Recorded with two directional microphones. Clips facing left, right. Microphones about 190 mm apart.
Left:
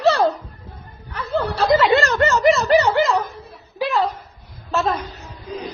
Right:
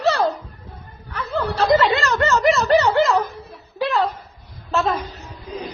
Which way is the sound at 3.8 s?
Centre (ahead or behind).